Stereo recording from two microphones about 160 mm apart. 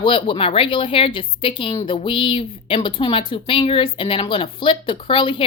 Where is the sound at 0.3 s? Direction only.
35° left (ahead or behind).